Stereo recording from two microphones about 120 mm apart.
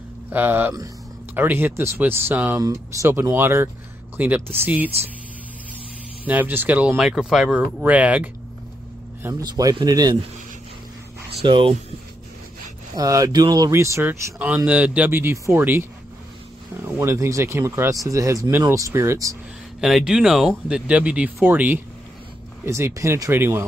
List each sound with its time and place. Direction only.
0.3 s speech: 15° right (ahead or behind)
2.6 s speech: 25° right (ahead or behind)
6.2 s speech: 15° right (ahead or behind)
9.3 s speech: 30° right (ahead or behind)
11.4 s speech: 45° right (ahead or behind)
12.9 s speech: 30° right (ahead or behind)
17.0 s speech: 25° right (ahead or behind)
19.8 s speech: 5° right (ahead or behind); by 23.6 s 20° right (ahead or behind)